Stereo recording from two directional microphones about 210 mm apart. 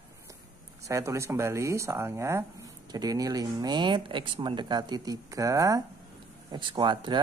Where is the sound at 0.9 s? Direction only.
15° right (ahead or behind).